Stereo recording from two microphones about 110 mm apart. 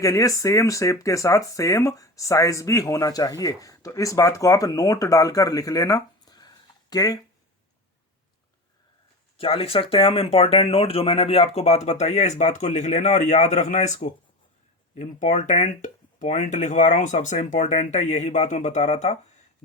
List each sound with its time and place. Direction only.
0.0 s speech: 30° left (ahead or behind)
9.4 s speech: 60° left (ahead or behind); by 19.1 s 85° left